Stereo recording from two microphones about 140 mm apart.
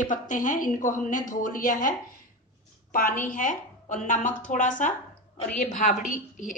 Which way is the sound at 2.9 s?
85° left.